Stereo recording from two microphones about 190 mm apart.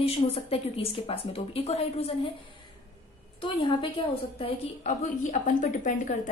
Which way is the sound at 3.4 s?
25° left (ahead or behind).